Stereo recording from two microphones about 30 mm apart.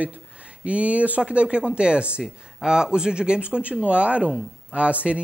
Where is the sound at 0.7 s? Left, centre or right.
Right.